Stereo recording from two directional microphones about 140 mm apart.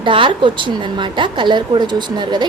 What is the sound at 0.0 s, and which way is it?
A woman's voice, 35° right (ahead or behind).